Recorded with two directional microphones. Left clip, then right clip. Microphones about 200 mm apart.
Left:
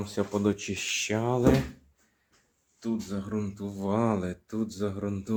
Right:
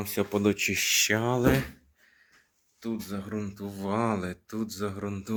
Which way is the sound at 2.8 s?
20° right (ahead or behind).